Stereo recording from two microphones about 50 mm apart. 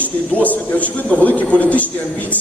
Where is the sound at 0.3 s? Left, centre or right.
Left.